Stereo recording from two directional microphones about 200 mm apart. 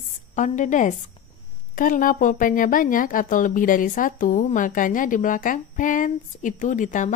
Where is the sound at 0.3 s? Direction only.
40° left (ahead or behind).